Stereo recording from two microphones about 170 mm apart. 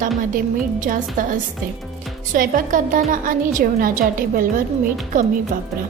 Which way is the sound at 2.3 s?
50° right (ahead or behind).